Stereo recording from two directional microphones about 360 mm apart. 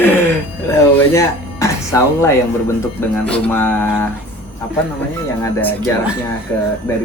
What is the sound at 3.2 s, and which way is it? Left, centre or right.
Music, centre.